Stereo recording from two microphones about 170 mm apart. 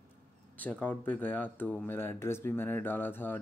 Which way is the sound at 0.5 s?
10° left (ahead or behind).